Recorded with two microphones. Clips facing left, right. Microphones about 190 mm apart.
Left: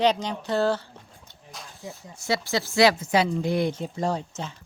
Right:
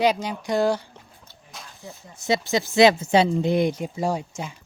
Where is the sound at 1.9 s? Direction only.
20° right (ahead or behind).